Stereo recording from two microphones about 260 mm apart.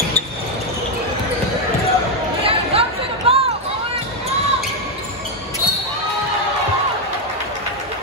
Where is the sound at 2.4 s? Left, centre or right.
Right.